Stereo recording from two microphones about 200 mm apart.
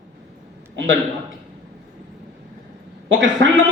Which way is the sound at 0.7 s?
70° right (ahead or behind).